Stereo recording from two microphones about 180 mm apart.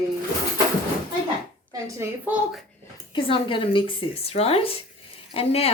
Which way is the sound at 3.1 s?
30° left (ahead or behind).